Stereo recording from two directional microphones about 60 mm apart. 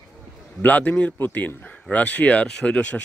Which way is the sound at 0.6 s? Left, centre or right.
Left.